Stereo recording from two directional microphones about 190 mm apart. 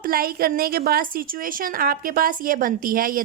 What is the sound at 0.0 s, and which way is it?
A woman's voice, 50° right (ahead or behind).